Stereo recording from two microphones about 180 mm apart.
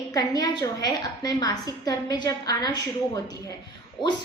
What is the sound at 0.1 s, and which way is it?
A woman's voice, 20° left (ahead or behind).